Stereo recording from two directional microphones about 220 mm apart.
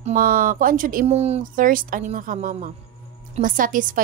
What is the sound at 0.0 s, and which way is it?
A woman's voice, 40° right (ahead or behind).